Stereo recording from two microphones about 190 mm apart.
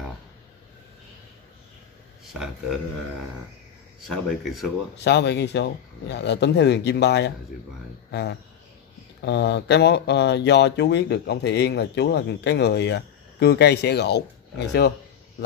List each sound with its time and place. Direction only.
2.3 s speech: 5° right (ahead or behind)
4.0 s speech: centre (ahead or behind)
4.9 s speech: 65° left (ahead or behind)